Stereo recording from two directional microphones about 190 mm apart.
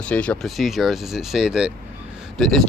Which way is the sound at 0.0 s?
5° left (ahead or behind).